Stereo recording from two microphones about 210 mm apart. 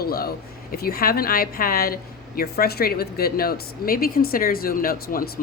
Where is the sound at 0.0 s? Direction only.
45° left (ahead or behind).